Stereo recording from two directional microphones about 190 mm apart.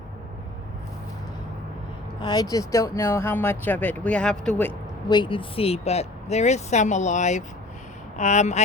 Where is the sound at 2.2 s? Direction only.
20° left (ahead or behind).